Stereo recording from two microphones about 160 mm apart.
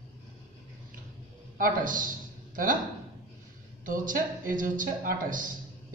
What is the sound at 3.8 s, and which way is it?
Speech, 60° right (ahead or behind).